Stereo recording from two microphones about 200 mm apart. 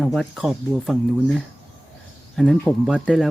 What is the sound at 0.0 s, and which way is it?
Speech, centre (ahead or behind).